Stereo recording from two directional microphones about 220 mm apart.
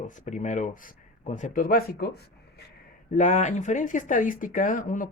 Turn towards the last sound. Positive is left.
turn(degrees=35)  # may be behind; listen again after turning